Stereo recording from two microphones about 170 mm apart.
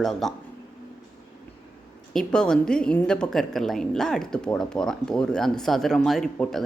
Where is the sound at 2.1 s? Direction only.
5° left (ahead or behind).